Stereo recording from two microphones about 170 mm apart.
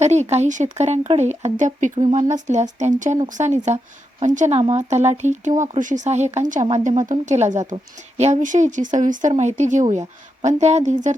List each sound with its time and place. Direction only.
0.0 s speech: 40° right (ahead or behind)